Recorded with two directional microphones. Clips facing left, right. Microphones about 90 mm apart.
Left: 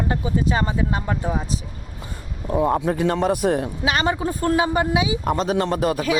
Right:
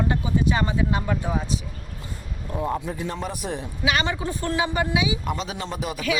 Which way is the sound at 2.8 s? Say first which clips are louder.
Left 10 dB; 70° left (ahead or behind).